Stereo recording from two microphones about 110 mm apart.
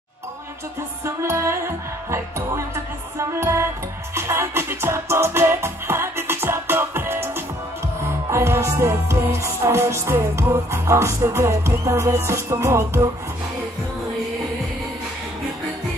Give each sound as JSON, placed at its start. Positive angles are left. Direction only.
{"t": 1.0, "sound": "music", "side_deg": -25}